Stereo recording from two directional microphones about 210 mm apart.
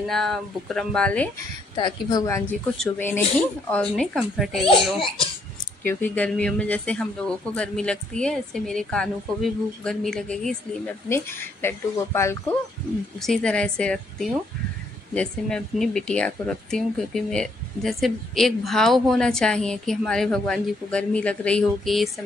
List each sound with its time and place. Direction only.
0.1 s speech: centre (ahead or behind)
1.8 s a woman's voice: 20° left (ahead or behind); by 4.6 s centre (ahead or behind)
5.9 s speech: 10° left (ahead or behind)